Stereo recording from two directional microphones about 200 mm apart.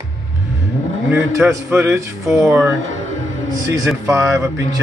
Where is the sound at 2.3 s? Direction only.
Centre (ahead or behind).